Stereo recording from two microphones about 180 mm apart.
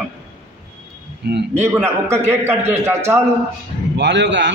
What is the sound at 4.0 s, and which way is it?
Speech, 80° right.